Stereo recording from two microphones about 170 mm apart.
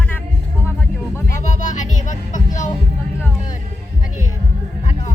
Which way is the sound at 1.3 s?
45° left (ahead or behind).